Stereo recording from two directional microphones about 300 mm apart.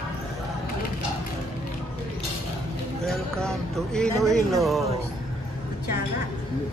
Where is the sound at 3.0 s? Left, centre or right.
Centre.